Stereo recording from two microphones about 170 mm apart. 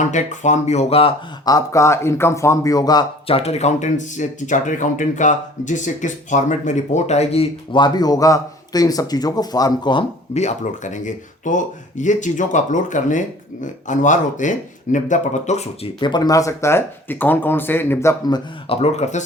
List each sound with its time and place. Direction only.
0.0 s speech: 45° left (ahead or behind)
1.5 s speech: 20° left (ahead or behind)
10.3 s speech: 45° left (ahead or behind)
16.0 s speech: 25° left (ahead or behind)
18.8 s speech: 40° left (ahead or behind)